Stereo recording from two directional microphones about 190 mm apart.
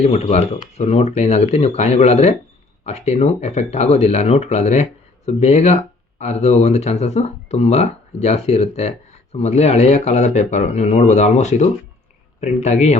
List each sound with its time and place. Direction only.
0.0 s speech: 35° left (ahead or behind)